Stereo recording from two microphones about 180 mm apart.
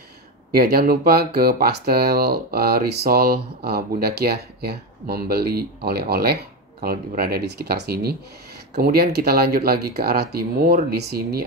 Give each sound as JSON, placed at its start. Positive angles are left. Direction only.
{"t": 0.5, "sound": "speech", "side_deg": -60}